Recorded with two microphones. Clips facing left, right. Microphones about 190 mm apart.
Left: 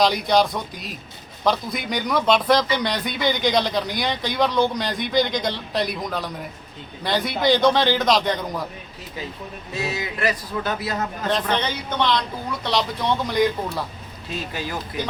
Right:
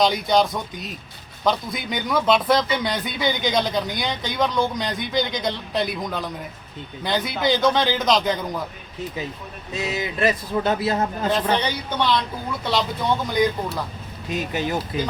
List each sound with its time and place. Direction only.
0.0 s speech: centre (ahead or behind)
9.7 s speech: 20° right (ahead or behind)
11.5 s speech: 10° right (ahead or behind)
14.3 s speech: 20° right (ahead or behind)